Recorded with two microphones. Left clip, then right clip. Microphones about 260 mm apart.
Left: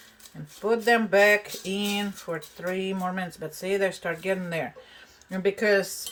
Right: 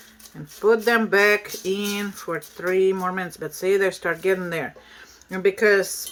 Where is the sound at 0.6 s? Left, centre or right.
Centre.